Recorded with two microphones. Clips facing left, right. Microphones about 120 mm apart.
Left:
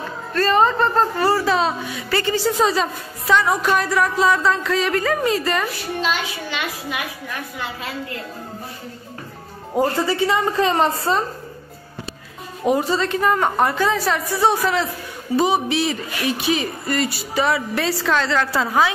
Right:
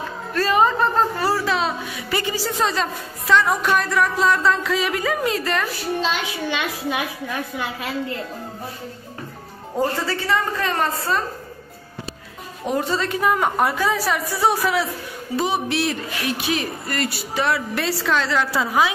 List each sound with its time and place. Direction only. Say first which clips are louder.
0.3 s a woman's voice: left 1 dB; 5° right (ahead or behind)
2.0 s a woman's voice: left 3 dB; 15° right (ahead or behind)
2.3 s a woman's voice: left 6 dB; centre (ahead or behind)
5.9 s a woman's voice: left 1 dB; 25° right (ahead or behind)
9.8 s a woman's voice: left 4 dB; 15° left (ahead or behind)
12.6 s a woman's voice: left 4 dB; 5° left (ahead or behind)